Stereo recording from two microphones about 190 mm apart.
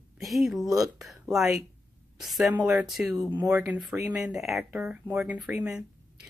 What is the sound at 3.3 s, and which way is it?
Speech, 20° right (ahead or behind).